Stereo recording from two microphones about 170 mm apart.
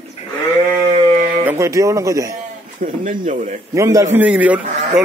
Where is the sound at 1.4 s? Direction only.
15° right (ahead or behind).